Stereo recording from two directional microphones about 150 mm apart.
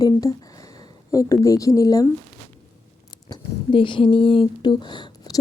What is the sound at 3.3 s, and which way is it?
Speech, 35° left (ahead or behind).